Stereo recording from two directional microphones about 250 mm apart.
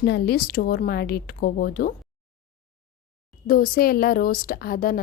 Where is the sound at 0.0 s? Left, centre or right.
Left.